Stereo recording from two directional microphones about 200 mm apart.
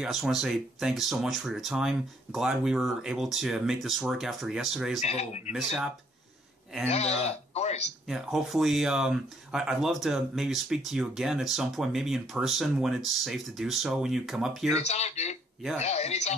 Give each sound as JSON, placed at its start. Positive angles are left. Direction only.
{"t": 0.0, "sound": "speech", "side_deg": 0}
{"t": 5.0, "sound": "speech", "side_deg": 35}
{"t": 5.5, "sound": "speech", "side_deg": -5}
{"t": 6.9, "sound": "speech", "side_deg": 30}
{"t": 8.1, "sound": "speech", "side_deg": 0}
{"t": 14.7, "sound": "speech", "side_deg": 35}